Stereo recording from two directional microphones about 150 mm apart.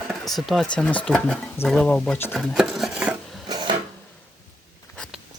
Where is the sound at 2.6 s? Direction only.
5° right (ahead or behind).